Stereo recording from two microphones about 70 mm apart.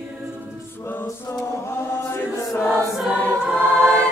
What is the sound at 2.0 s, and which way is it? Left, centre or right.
Chant, left.